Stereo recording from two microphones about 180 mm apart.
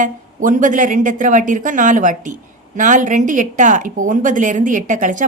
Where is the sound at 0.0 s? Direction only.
45° right (ahead or behind).